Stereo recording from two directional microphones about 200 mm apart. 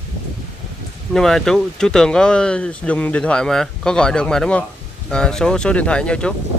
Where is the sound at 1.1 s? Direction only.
Centre (ahead or behind).